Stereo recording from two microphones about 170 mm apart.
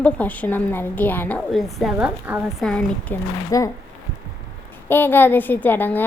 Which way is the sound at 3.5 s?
20° left (ahead or behind).